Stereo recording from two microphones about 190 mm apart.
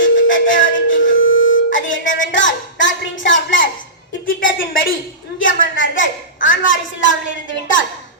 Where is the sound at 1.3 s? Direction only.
90° left.